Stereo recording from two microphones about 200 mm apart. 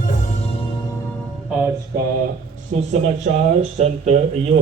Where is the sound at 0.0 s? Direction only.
35° left (ahead or behind).